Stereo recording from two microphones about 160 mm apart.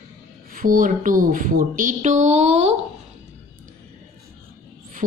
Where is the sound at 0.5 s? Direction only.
60° right (ahead or behind); by 2.7 s 40° right (ahead or behind).